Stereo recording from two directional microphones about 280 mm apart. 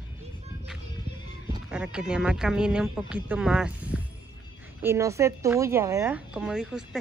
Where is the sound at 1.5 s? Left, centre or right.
Centre.